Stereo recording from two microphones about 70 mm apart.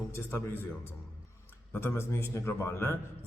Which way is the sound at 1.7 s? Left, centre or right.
Left.